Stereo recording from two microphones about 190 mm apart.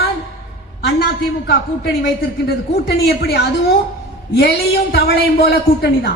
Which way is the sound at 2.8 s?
55° left (ahead or behind).